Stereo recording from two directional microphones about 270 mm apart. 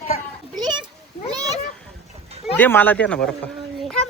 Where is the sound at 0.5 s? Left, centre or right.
Centre.